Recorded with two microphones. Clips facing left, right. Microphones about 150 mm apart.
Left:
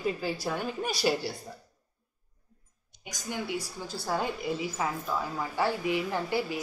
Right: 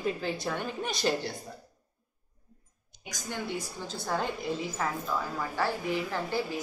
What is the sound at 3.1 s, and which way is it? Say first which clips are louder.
A woman's voice: left 1 dB; 10° left (ahead or behind).